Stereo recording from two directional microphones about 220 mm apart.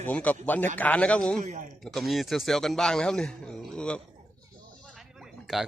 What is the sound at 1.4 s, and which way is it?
Speech, 35° right (ahead or behind).